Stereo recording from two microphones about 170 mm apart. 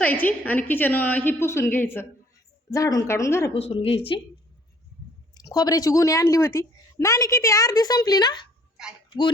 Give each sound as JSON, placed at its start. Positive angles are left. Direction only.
{"t": 0.0, "sound": "a woman's voice", "side_deg": 10}
{"t": 3.5, "sound": "speech", "side_deg": 35}
{"t": 5.3, "sound": "a woman's voice", "side_deg": 20}